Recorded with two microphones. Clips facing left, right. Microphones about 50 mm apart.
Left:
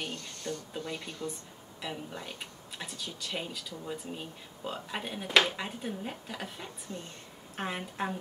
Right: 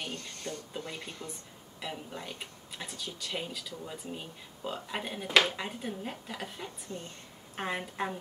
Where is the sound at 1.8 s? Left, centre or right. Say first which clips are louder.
Left 1 dB; centre.